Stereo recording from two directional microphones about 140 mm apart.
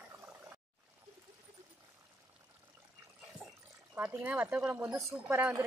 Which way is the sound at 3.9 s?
15° right (ahead or behind).